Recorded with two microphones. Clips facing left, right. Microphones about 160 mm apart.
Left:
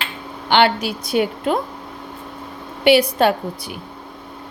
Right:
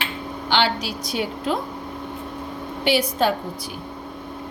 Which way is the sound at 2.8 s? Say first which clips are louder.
Left 6 dB; 65° left (ahead or behind).